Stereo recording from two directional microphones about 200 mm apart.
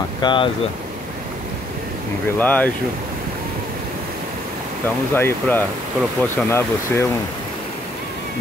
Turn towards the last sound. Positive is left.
turn(degrees=10)  # may be behind; listen again after turning